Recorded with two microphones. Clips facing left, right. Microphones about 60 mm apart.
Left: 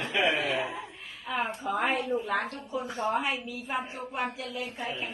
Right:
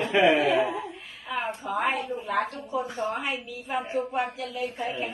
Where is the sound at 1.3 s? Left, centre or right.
Centre.